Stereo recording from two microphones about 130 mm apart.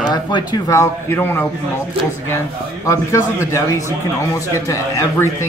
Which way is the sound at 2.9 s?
20° left (ahead or behind).